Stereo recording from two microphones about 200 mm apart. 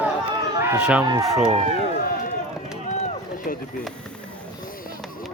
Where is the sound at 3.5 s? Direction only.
45° left (ahead or behind).